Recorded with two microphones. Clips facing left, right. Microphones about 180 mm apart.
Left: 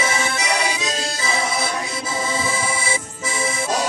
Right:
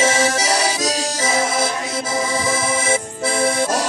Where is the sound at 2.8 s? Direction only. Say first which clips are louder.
Right 6 dB; 50° right (ahead or behind).